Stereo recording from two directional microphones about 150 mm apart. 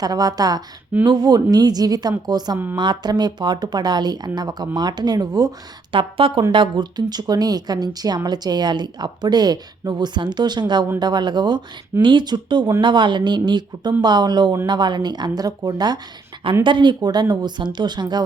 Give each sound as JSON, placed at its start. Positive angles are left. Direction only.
{"t": 0.0, "sound": "speech", "side_deg": -25}